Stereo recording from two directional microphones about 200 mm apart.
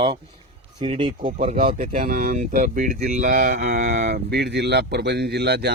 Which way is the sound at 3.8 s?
55° right (ahead or behind).